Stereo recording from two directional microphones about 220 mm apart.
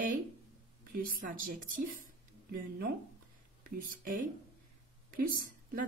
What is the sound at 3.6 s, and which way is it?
A woman's voice, 40° right (ahead or behind).